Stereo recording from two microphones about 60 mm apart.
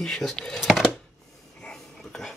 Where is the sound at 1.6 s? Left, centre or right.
Centre.